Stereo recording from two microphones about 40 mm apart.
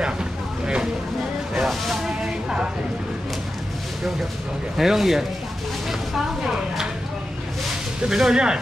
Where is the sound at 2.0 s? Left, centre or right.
Right.